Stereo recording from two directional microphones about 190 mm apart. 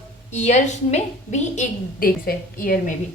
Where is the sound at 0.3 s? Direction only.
40° left (ahead or behind).